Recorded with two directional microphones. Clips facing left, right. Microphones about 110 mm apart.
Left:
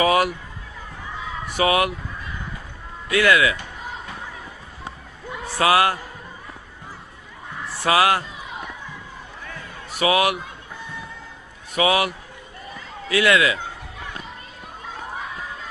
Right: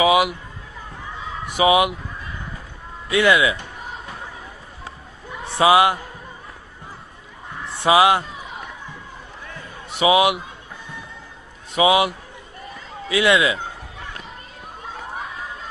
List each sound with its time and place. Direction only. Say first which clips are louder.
0.0 s speech: right 2 dB; 10° right (ahead or behind)
1.5 s speech: right 3 dB; 15° right (ahead or behind)
3.1 s speech: right 1 dB; 20° right (ahead or behind)
5.5 s speech: right 3 dB; 20° right (ahead or behind)
7.9 s speech: right 3 dB; 20° right (ahead or behind)
9.9 s speech: right 3 dB; 20° right (ahead or behind)
11.7 s speech: right 3 dB; 20° right (ahead or behind)